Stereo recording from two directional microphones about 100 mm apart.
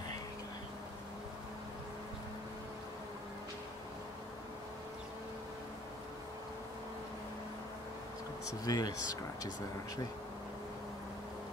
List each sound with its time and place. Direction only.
8.6 s speech: 40° left (ahead or behind)